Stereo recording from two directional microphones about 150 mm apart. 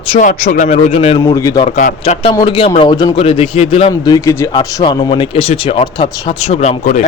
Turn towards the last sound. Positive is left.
turn(degrees=50)  # may be behind; listen again after turning